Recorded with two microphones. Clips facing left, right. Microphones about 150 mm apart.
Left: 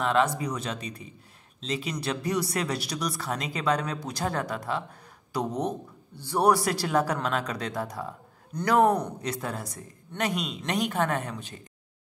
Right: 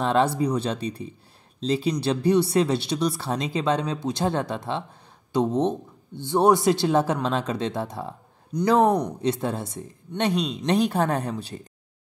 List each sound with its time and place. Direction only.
0.0 s speech: 30° right (ahead or behind)